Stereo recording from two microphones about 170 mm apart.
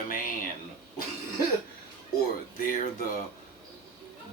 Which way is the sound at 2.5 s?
50° left (ahead or behind).